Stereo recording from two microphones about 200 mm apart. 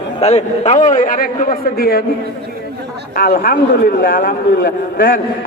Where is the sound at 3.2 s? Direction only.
45° left (ahead or behind).